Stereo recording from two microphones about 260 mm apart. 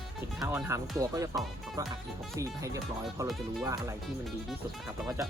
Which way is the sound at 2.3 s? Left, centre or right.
Centre.